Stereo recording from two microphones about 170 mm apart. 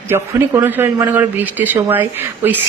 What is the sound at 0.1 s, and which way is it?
A man's voice, 15° right (ahead or behind).